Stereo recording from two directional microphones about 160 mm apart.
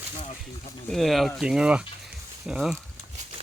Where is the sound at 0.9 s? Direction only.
Centre (ahead or behind).